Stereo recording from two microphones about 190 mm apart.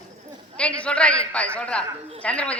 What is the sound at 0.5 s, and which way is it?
A man's voice, 5° left (ahead or behind).